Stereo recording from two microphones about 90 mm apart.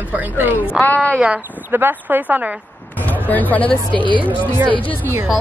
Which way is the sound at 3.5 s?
15° left (ahead or behind).